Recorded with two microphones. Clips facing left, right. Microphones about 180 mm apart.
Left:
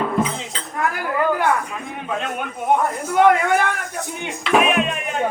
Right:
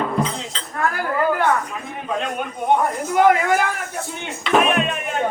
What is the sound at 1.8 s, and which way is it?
A man's voice, centre (ahead or behind).